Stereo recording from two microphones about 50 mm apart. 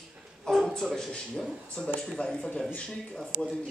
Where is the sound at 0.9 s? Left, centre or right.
Centre.